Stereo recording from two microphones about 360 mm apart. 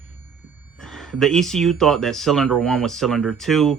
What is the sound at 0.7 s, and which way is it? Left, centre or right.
Speech, centre.